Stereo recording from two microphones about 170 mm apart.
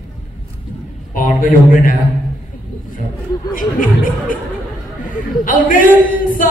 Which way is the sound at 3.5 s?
55° left (ahead or behind).